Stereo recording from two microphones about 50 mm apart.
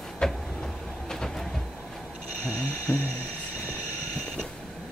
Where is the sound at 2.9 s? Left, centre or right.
Centre.